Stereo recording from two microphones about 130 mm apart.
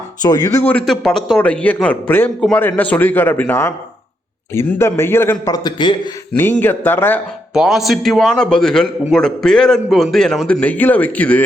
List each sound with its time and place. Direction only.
0.2 s a man's voice: 30° left (ahead or behind)
5.6 s a man's voice: 35° left (ahead or behind)
6.3 s a man's voice: 15° left (ahead or behind)
7.5 s a man's voice: 5° right (ahead or behind)